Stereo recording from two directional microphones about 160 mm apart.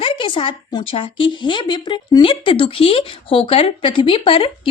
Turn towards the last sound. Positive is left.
turn(degrees=35)  # may be behind; listen again after turning